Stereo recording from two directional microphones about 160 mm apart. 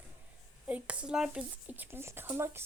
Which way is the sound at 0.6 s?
10° right (ahead or behind).